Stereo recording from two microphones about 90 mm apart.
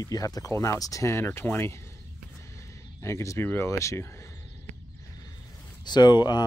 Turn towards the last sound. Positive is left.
turn(degrees=55)  # may be behind; listen again after turning